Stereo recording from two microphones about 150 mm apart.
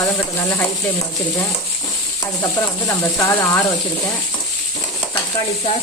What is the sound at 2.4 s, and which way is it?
Speech, 20° left (ahead or behind).